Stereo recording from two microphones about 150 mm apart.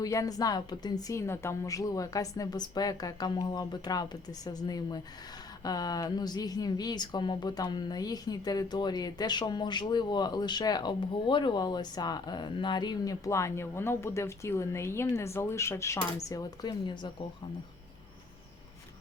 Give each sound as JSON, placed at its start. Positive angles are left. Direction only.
{"t": 0.0, "sound": "speech", "side_deg": 20}